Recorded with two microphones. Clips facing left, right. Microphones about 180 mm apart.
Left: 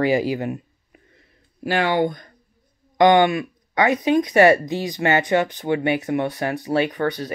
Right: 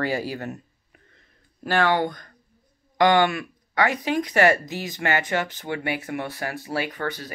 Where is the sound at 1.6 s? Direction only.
10° left (ahead or behind).